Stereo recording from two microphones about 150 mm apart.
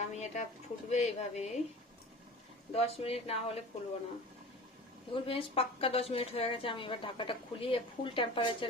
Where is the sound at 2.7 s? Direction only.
40° left (ahead or behind).